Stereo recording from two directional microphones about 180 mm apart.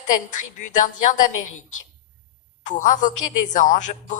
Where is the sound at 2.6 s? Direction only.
45° left (ahead or behind).